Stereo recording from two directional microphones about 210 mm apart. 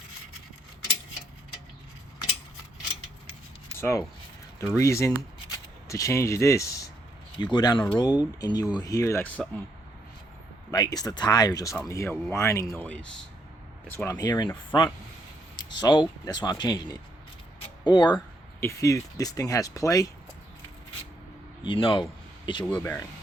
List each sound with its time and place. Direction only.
3.8 s speech: 15° left (ahead or behind)
10.7 s speech: 20° left (ahead or behind)
21.6 s speech: 25° left (ahead or behind)